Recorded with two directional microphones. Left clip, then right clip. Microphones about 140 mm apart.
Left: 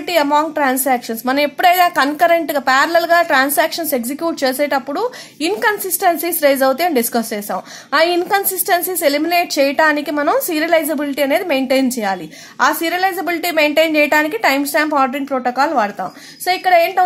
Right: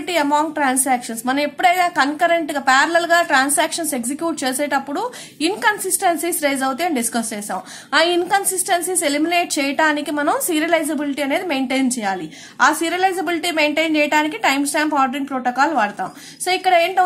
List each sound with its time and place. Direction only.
0.1 s a woman's voice: 40° left (ahead or behind)